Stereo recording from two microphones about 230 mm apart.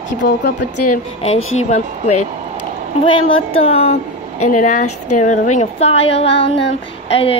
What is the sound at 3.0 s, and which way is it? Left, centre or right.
A woman's voice, left.